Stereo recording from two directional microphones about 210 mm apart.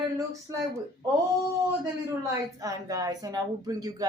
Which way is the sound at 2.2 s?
15° right (ahead or behind).